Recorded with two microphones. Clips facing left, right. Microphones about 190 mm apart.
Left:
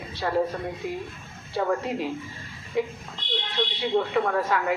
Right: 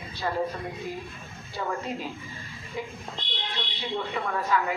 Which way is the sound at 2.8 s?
75° left (ahead or behind).